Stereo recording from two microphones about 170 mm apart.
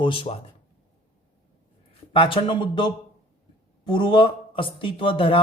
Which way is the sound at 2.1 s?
30° left (ahead or behind).